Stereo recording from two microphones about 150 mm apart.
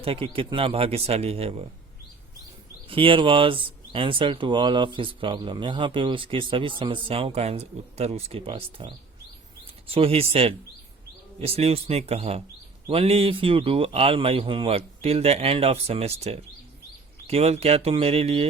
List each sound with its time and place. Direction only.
0.0 s speech: 40° right (ahead or behind)
2.8 s speech: 35° right (ahead or behind)